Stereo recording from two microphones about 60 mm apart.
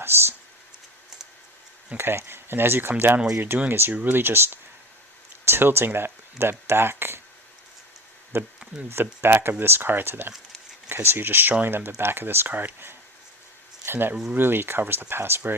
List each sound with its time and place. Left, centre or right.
0.0 s a sound: right
2.0 s speech: right
8.3 s speech: right